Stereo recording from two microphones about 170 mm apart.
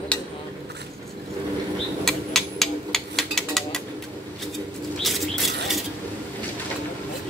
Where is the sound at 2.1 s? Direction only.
Centre (ahead or behind).